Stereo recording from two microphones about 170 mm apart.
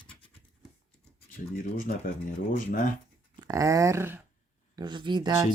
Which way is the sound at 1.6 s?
55° left (ahead or behind).